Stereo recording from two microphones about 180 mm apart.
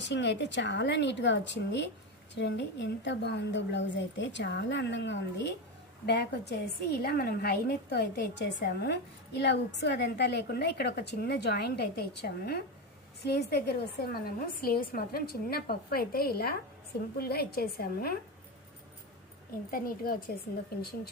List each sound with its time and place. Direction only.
0.0 s a woman's voice: 75° left (ahead or behind); by 18.1 s 60° left (ahead or behind)
19.7 s a woman's voice: 55° left (ahead or behind)